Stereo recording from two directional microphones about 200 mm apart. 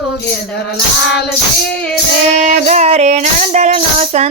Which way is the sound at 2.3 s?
35° right (ahead or behind).